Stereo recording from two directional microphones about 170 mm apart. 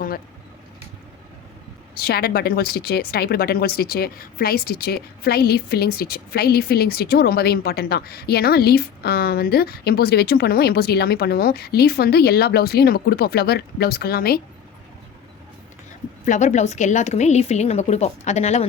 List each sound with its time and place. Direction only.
2.0 s speech: 65° left (ahead or behind)
16.2 s a woman's voice: 45° left (ahead or behind)